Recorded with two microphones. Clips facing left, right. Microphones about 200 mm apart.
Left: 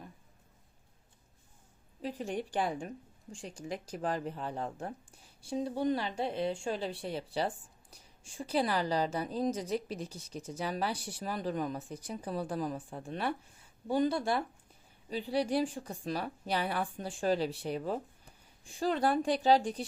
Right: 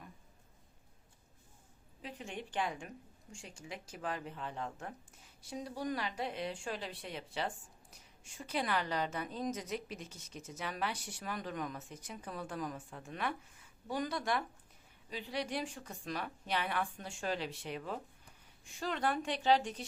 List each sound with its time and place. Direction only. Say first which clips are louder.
2.0 s speech: left 9 dB; 40° left (ahead or behind)